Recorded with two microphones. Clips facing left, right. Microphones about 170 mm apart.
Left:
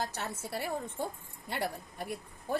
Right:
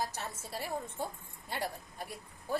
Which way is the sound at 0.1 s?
65° left (ahead or behind).